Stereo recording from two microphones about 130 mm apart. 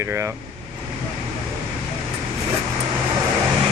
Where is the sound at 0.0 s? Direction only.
20° right (ahead or behind).